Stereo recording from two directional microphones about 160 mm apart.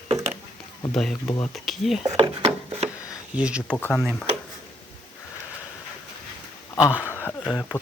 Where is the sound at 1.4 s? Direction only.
Centre (ahead or behind).